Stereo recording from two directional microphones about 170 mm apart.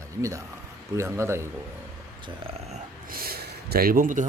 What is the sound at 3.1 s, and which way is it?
A man's voice, 60° right (ahead or behind).